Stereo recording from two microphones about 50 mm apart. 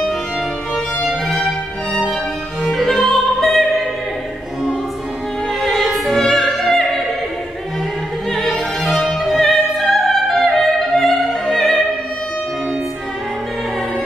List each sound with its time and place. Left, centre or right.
2.7 s opera: centre
5.6 s opera: centre
9.2 s opera: centre